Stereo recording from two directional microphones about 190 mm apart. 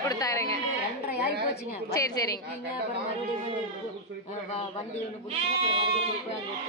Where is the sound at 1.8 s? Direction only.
20° left (ahead or behind).